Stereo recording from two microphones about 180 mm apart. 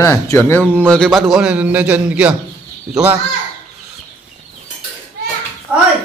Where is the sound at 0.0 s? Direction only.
15° left (ahead or behind).